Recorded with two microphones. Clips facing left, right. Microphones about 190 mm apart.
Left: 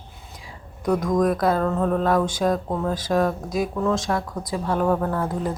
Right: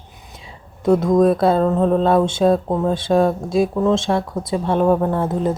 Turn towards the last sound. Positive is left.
turn(degrees=-25)  # may be behind; listen again after turning